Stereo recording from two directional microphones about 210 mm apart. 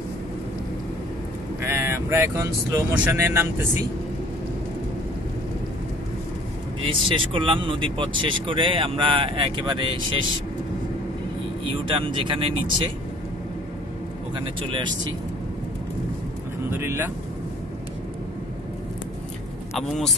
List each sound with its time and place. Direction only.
1.6 s speech: 10° right (ahead or behind)
6.9 s speech: 25° right (ahead or behind)
11.6 s speech: 25° right (ahead or behind)
16.7 s speech: 10° right (ahead or behind)
19.7 s a man's voice: centre (ahead or behind)